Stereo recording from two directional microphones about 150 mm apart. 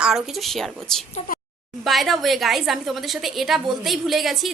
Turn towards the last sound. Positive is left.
turn(degrees=0)  # may be behind; listen again after turning